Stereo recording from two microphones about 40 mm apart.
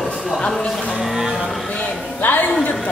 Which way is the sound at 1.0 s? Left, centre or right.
Centre.